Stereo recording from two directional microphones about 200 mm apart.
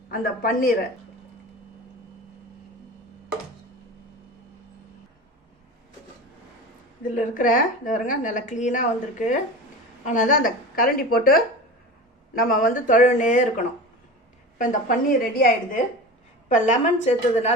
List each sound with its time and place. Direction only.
0.1 s a woman's voice: 45° left (ahead or behind)
7.0 s a woman's voice: 40° left (ahead or behind)